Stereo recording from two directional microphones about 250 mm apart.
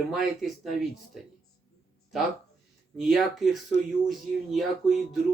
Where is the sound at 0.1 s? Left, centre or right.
Centre.